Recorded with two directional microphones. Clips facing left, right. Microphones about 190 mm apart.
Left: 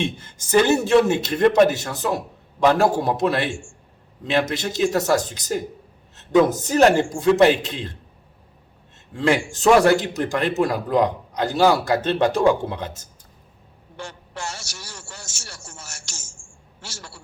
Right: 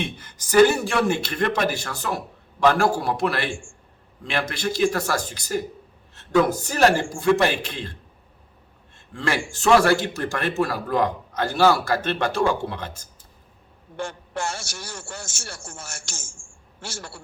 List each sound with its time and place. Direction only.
0.0 s speech: 25° left (ahead or behind)
9.1 s speech: 20° left (ahead or behind)
13.9 s a man's voice: 50° right (ahead or behind)